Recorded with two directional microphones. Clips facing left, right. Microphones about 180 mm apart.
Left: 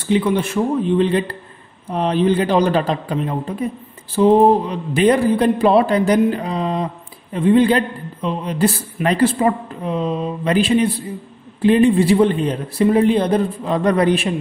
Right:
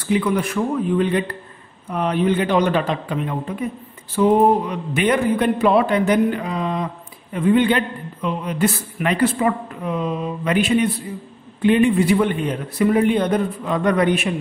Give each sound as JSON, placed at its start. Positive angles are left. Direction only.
{"t": 0.0, "sound": "speech", "side_deg": 25}